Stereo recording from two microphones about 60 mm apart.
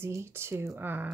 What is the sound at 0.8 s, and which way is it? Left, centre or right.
Speech, right.